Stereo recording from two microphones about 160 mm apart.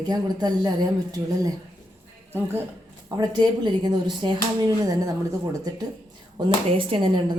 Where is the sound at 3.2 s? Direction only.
25° right (ahead or behind).